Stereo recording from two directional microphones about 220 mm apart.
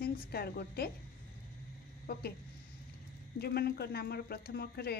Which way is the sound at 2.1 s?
45° left (ahead or behind).